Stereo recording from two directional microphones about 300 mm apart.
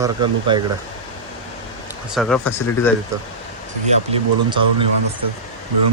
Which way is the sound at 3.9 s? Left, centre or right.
Right.